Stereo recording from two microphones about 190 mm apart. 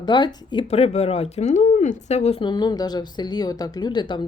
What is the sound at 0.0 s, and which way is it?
Speech, 20° left (ahead or behind).